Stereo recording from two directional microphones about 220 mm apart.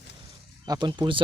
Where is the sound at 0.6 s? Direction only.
20° right (ahead or behind).